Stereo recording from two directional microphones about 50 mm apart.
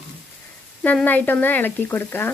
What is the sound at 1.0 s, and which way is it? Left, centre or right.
Speech, left.